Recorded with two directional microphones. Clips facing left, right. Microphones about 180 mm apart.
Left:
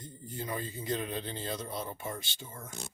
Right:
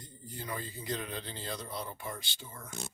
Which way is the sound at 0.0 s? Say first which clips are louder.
Left 4 dB; 20° left (ahead or behind).